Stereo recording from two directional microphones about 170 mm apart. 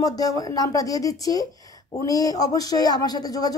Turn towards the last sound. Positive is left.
turn(degrees=20)  # may be behind; listen again after turning